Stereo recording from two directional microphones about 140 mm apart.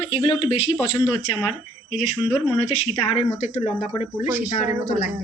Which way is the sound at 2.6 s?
50° left (ahead or behind).